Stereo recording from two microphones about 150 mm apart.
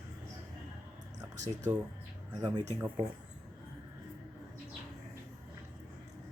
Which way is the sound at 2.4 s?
25° right (ahead or behind).